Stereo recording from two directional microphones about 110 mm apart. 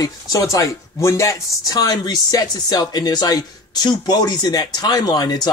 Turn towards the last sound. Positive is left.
turn(degrees=40)  # may be behind; listen again after turning